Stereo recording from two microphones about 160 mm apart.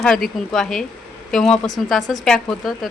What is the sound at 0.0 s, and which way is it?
Speech, centre (ahead or behind).